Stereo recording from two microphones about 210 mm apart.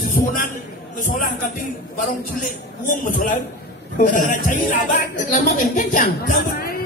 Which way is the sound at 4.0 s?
40° left (ahead or behind).